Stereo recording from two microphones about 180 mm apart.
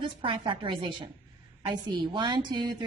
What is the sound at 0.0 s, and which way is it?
A woman's voice, 30° right (ahead or behind).